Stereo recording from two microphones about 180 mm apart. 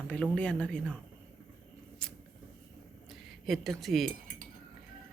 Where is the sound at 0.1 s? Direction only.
5° left (ahead or behind).